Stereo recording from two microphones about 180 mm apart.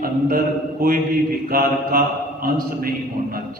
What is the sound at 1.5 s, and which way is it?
A man's voice, 55° right (ahead or behind).